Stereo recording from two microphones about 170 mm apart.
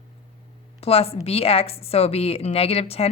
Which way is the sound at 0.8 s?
35° left (ahead or behind).